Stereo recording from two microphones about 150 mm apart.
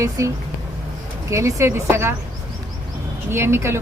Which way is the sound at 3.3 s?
15° right (ahead or behind).